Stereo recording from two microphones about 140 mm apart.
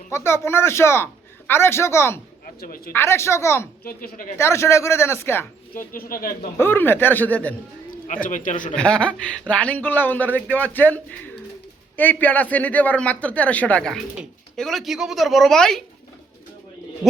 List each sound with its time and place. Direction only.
0.1 s speech: 20° left (ahead or behind)
2.6 s speech: 90° left
2.9 s speech: 15° left (ahead or behind)
3.8 s a woman's voice: 85° left
4.4 s speech: 20° left (ahead or behind)
5.7 s speech: 90° left
6.6 s speech: 15° left (ahead or behind)
8.0 s a man's voice: 65° left (ahead or behind)
8.7 s speech: 5° left (ahead or behind)